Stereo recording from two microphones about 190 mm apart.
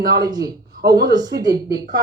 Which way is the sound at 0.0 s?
20° right (ahead or behind).